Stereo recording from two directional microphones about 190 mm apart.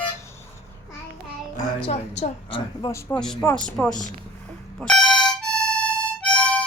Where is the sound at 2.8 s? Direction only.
20° left (ahead or behind).